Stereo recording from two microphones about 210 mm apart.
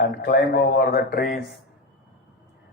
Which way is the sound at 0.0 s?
45° left (ahead or behind).